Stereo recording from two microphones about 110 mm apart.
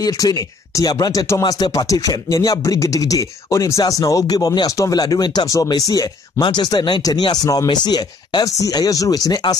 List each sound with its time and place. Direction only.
0.0 s speech: 35° left (ahead or behind)